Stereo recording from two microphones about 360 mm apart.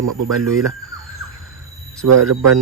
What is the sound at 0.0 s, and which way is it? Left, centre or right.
Speech, right.